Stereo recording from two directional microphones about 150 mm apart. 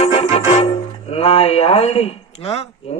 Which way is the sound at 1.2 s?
40° left (ahead or behind).